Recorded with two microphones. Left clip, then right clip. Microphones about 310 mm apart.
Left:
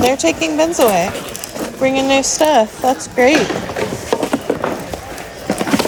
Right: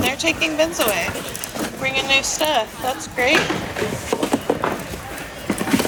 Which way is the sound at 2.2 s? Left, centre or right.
Left.